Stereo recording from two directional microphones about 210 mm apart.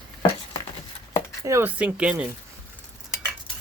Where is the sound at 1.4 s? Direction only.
15° right (ahead or behind).